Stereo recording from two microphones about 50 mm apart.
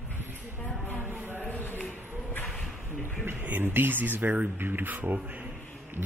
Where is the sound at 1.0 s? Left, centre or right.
Right.